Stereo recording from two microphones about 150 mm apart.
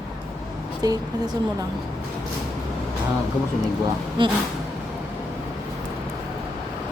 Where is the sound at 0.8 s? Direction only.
25° right (ahead or behind).